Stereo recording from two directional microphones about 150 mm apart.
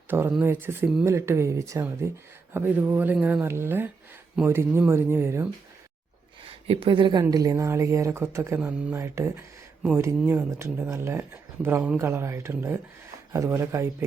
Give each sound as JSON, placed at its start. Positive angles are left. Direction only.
{"t": 0.1, "sound": "speech", "side_deg": -15}
{"t": 6.5, "sound": "speech", "side_deg": -35}